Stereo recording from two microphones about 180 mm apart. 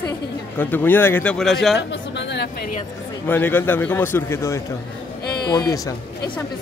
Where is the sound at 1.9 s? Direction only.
75° left (ahead or behind).